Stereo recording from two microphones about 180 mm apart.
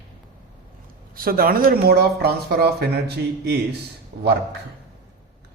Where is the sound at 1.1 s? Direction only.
55° right (ahead or behind).